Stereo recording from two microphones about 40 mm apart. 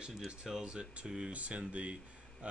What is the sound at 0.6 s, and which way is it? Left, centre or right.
Speech, right.